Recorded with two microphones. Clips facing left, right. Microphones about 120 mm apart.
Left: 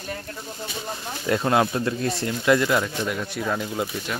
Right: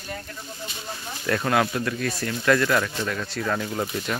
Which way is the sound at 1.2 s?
20° left (ahead or behind).